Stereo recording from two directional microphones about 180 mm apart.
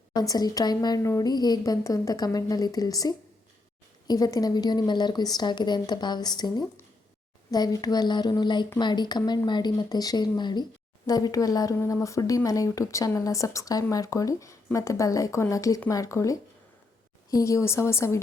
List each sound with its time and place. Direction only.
0.1 s a woman's voice: 20° left (ahead or behind)